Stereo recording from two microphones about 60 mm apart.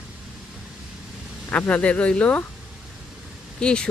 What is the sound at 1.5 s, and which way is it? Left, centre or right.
Speech, left.